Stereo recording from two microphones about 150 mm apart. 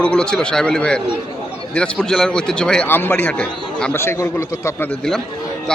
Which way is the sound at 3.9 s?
15° left (ahead or behind).